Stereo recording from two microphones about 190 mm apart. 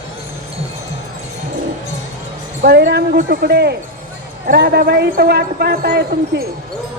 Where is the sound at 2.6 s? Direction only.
60° right (ahead or behind).